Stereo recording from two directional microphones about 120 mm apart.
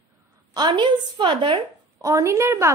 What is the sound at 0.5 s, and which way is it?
A woman's voice, 40° right (ahead or behind).